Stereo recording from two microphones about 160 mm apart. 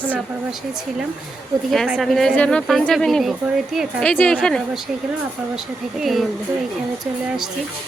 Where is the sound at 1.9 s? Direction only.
Centre (ahead or behind).